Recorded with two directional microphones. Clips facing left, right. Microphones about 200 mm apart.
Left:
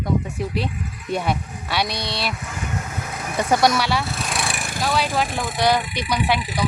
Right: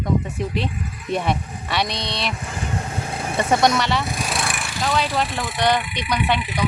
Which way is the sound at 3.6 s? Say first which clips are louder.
Even; 5° left (ahead or behind).